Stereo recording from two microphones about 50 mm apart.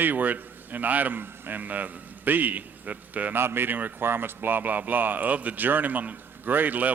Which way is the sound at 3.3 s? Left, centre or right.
Right.